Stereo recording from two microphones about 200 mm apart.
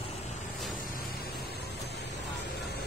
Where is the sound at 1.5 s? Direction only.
55° left (ahead or behind).